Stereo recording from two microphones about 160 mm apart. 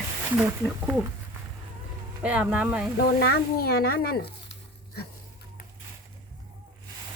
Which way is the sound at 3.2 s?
75° left (ahead or behind).